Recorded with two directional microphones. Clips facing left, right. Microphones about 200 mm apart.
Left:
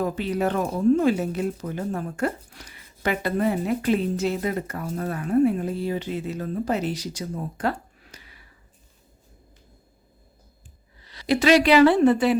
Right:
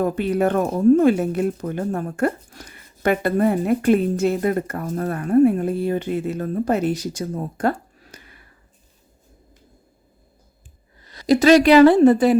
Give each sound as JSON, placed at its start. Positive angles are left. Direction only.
{"t": 0.0, "sound": "speech", "side_deg": -55}
{"t": 11.0, "sound": "a woman's voice", "side_deg": -45}